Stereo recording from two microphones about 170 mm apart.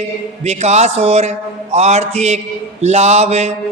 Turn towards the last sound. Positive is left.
turn(degrees=-40)  # may be behind; listen again after turning